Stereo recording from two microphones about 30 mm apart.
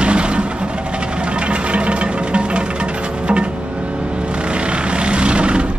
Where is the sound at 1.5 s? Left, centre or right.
Right.